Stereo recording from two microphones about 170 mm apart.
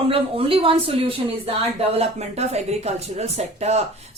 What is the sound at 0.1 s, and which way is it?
A woman's voice, 30° right (ahead or behind).